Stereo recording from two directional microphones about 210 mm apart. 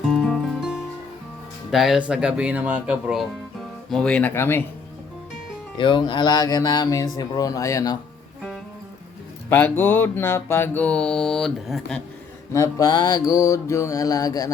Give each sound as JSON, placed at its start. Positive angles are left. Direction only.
{"t": 0.1, "sound": "music", "side_deg": 0}
{"t": 1.7, "sound": "speech", "side_deg": 0}
{"t": 3.8, "sound": "mantra", "side_deg": 5}
{"t": 5.7, "sound": "speech", "side_deg": 20}
{"t": 9.5, "sound": "mantra", "side_deg": 10}
{"t": 12.5, "sound": "mantra", "side_deg": 15}